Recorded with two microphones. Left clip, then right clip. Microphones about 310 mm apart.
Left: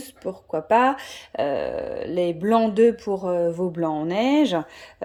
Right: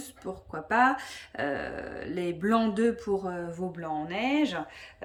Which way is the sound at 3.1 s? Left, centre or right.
Centre.